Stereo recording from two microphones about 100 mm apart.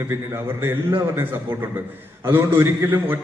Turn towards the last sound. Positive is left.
turn(degrees=-20)  # may be behind; listen again after turning